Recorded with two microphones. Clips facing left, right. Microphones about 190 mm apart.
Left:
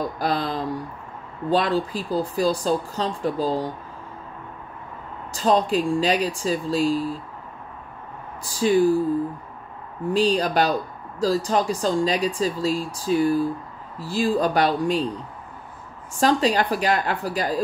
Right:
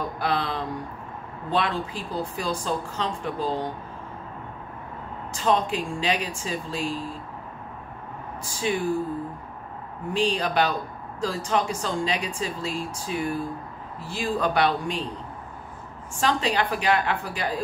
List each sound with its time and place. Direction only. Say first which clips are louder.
0.2 s a woman's voice: left 1 dB; 40° left (ahead or behind)
5.3 s a woman's voice: left 4 dB; 35° left (ahead or behind)
8.5 s a woman's voice: left 8 dB; 35° left (ahead or behind)
10.1 s a woman's voice: left 4 dB; 40° left (ahead or behind)
16.2 s a woman's voice: left 5 dB; 40° left (ahead or behind)